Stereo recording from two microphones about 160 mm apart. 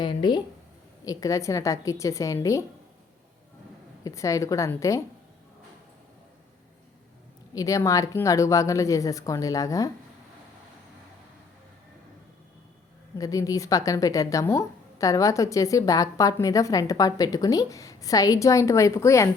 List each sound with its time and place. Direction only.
0.0 s speech: 30° left (ahead or behind)
4.0 s speech: 20° left (ahead or behind)
7.5 s speech: 20° left (ahead or behind)
13.1 s speech: 20° left (ahead or behind)